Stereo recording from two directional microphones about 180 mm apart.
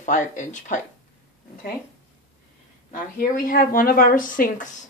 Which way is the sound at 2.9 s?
50° left (ahead or behind).